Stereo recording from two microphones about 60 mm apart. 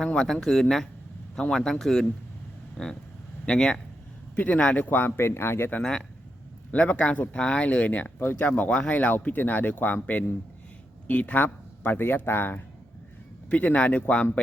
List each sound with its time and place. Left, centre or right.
0.0 s speech: centre; by 5.7 s left
6.7 s speech: left
8.2 s speech: left
8.4 s speech: left
13.5 s speech: left